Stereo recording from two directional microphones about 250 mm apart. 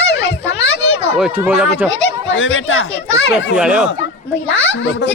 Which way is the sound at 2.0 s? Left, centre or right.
Left.